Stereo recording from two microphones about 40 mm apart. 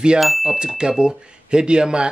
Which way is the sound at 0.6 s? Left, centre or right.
Right.